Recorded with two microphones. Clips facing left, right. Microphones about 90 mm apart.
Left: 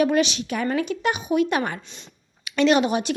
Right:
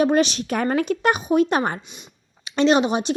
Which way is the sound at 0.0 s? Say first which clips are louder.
Right 2 dB; 35° right (ahead or behind).